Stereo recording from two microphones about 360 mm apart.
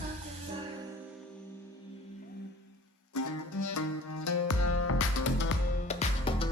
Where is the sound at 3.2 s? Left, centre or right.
Left.